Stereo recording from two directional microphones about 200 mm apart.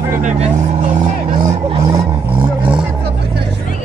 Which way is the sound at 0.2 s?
35° right (ahead or behind).